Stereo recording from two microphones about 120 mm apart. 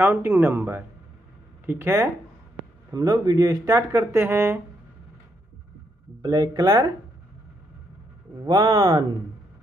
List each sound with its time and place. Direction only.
0.0 s speech: 15° right (ahead or behind)
6.2 s speech: 35° right (ahead or behind)
8.5 s speech: 40° right (ahead or behind)